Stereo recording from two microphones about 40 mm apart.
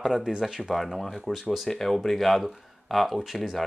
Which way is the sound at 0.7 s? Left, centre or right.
Centre.